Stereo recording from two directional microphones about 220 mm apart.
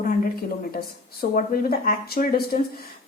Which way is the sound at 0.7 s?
45° left (ahead or behind).